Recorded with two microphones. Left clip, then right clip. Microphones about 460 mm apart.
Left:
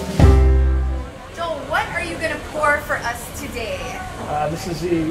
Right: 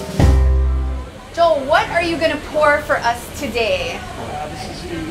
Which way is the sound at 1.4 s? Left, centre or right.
Right.